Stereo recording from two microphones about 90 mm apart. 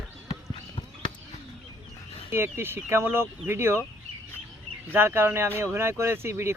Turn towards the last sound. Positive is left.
turn(degrees=-30)  # may be behind; listen again after turning